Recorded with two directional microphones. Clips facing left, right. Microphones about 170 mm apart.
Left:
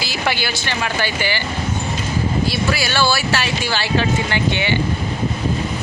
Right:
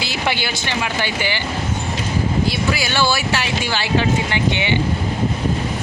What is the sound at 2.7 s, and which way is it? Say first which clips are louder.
Speech: even; 15° right (ahead or behind).